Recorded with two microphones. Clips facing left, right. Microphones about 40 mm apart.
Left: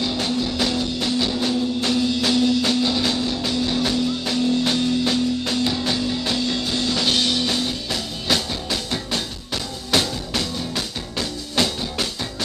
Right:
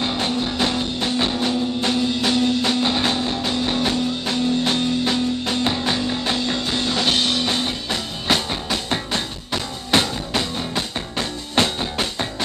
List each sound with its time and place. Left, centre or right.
0.0 s music: right